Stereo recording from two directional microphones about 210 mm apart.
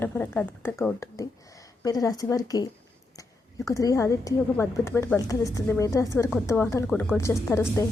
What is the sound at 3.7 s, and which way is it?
A woman's voice, 15° left (ahead or behind).